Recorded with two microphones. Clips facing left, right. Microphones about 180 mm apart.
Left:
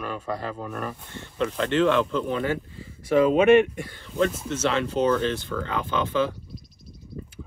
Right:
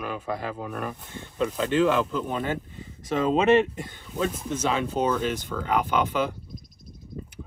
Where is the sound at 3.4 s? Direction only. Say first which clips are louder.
Left 3 dB; 25° right (ahead or behind).